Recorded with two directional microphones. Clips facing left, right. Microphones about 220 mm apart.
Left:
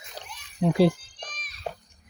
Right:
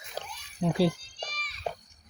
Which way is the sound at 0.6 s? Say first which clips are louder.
Left 5 dB; 50° left (ahead or behind).